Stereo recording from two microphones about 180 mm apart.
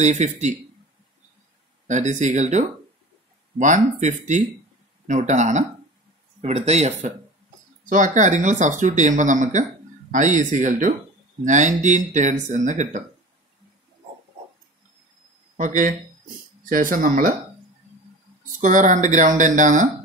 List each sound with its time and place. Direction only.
0.0 s speech: 40° right (ahead or behind)
1.9 s speech: 40° right (ahead or behind)
15.5 s speech: 45° right (ahead or behind)
18.4 s speech: 45° right (ahead or behind)